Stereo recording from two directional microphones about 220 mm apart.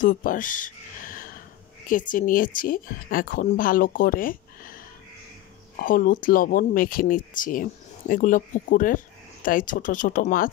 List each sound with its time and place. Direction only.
0.0 s speech: 35° left (ahead or behind)
5.8 s speech: 40° left (ahead or behind)